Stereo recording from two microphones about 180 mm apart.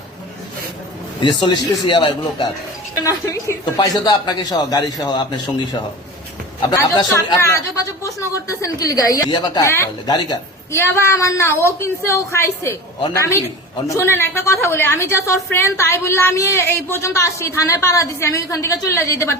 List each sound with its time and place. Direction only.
1.2 s a woman's voice: 25° left (ahead or behind)